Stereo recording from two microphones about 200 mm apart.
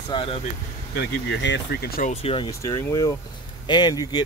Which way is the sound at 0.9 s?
60° left (ahead or behind).